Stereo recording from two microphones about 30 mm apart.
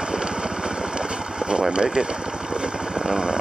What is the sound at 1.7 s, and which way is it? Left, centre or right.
Speech, right.